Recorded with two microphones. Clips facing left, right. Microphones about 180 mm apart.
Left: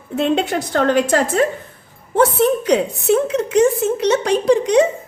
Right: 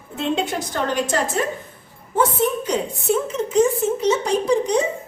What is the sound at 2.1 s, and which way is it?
A woman's voice, 75° left (ahead or behind).